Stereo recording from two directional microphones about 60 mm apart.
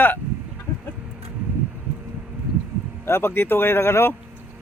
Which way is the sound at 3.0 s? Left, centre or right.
Left.